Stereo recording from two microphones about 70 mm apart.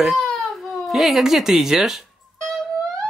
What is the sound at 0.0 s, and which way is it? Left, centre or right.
Baby cry, centre.